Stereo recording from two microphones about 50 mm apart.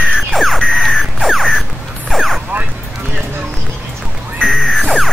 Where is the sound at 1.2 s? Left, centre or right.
Centre.